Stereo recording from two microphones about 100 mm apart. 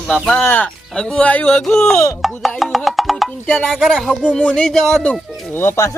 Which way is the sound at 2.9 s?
Centre (ahead or behind).